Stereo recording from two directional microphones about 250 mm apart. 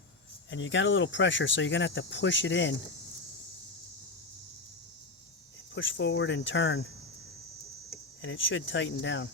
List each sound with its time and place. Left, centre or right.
0.5 s speech: left
5.7 s speech: left
8.2 s speech: left